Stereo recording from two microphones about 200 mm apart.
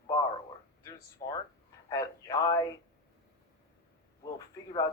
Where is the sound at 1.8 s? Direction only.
20° left (ahead or behind).